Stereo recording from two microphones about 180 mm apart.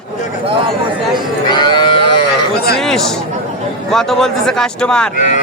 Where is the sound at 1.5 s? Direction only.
25° left (ahead or behind).